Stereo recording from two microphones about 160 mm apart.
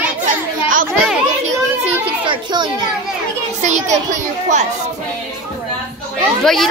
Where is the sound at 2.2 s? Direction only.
30° right (ahead or behind).